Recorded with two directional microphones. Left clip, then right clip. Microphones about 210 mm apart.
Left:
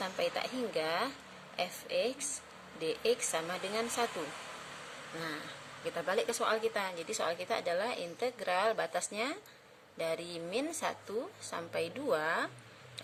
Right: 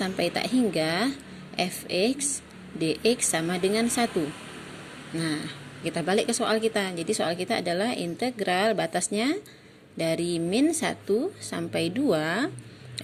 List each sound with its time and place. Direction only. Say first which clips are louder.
0.0 s speech: right 7 dB; 20° right (ahead or behind)
5.8 s speech: right 8 dB; 20° right (ahead or behind)